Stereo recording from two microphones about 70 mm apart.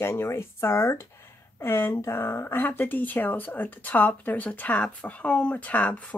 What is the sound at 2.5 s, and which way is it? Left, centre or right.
Speech, left.